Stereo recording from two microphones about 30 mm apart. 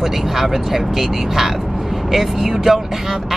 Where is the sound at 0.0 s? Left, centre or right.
Centre.